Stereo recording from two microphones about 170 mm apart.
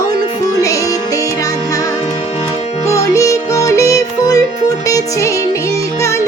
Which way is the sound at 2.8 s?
20° left (ahead or behind).